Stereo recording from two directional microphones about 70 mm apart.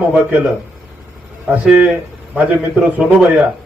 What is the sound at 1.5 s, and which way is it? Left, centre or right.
A man's voice, centre.